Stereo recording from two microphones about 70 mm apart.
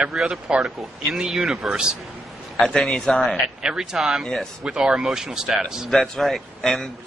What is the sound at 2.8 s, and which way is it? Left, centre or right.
Speech, centre.